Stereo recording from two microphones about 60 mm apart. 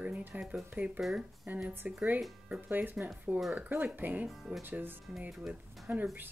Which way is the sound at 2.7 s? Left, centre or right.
Right.